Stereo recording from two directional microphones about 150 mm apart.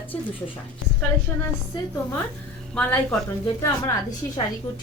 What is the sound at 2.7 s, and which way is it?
Speech, 5° left (ahead or behind).